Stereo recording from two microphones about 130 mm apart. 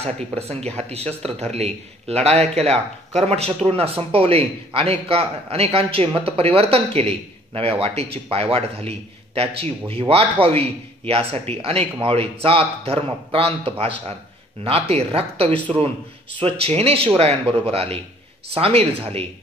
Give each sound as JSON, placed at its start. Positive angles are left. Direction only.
{"t": 0.4, "sound": "a man's voice", "side_deg": -55}
{"t": 15.4, "sound": "speech", "side_deg": 10}
{"t": 16.3, "sound": "a man's voice", "side_deg": -50}